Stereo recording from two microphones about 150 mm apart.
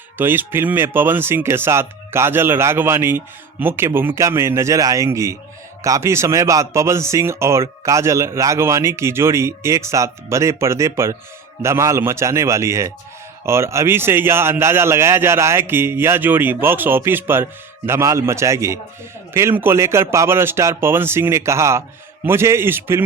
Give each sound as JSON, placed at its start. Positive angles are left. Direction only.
{"t": 0.2, "sound": "a man's voice", "side_deg": -15}